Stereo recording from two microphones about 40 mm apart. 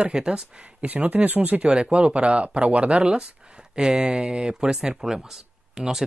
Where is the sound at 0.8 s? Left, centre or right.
Right.